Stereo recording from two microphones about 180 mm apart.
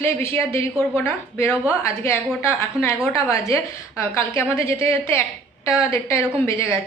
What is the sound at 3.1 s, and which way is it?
A woman's voice, 15° left (ahead or behind).